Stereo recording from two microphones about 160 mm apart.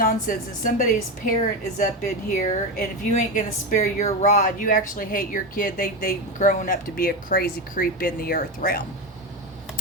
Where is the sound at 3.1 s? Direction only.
50° left (ahead or behind).